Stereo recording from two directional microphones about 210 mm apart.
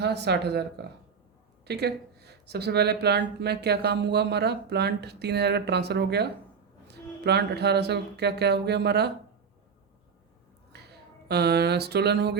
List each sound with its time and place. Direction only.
0.0 s speech: 55° right (ahead or behind)
10.7 s speech: 50° right (ahead or behind)